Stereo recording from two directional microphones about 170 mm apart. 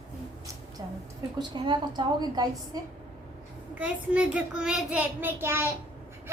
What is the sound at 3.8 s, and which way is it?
A child's voice, 5° right (ahead or behind).